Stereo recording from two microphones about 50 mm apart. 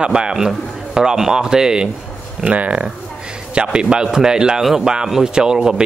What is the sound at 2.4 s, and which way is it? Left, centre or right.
Speech, right.